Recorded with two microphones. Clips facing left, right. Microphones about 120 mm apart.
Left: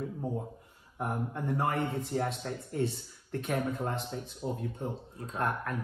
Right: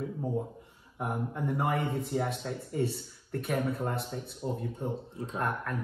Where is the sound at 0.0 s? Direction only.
Centre (ahead or behind).